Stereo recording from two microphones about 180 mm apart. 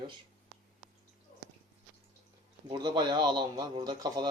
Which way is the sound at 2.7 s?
25° right (ahead or behind).